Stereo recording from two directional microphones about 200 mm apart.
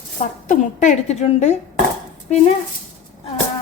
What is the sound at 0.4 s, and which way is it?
A woman's voice, 40° left (ahead or behind).